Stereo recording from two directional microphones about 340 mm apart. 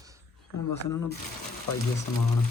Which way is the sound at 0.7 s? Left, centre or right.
Left.